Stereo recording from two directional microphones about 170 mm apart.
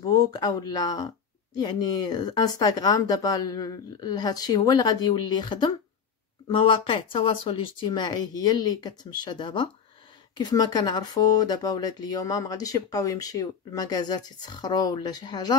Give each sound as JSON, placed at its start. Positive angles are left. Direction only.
{"t": 0.0, "sound": "speech", "side_deg": 20}